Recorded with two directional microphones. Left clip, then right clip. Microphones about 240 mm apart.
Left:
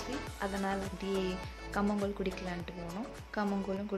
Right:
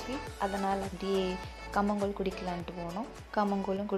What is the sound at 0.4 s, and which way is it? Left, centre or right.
Speech, centre.